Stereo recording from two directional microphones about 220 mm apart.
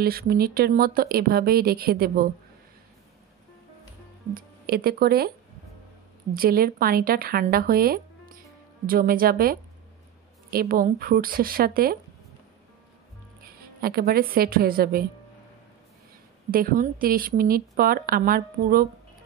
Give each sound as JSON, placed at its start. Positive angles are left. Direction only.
{"t": 0.0, "sound": "speech", "side_deg": -45}
{"t": 4.3, "sound": "speech", "side_deg": -45}
{"t": 6.3, "sound": "speech", "side_deg": -40}
{"t": 13.6, "sound": "speech", "side_deg": -45}
{"t": 16.4, "sound": "speech", "side_deg": -40}